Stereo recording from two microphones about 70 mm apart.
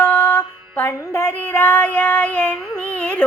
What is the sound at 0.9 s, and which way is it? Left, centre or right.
Child singing, left.